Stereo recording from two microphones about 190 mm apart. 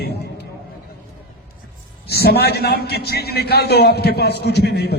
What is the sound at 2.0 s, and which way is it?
A man's voice, 55° left (ahead or behind).